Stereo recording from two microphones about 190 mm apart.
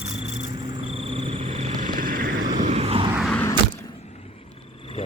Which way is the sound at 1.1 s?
30° right (ahead or behind).